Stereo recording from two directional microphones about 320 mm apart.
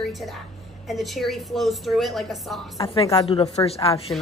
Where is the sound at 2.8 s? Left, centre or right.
Centre.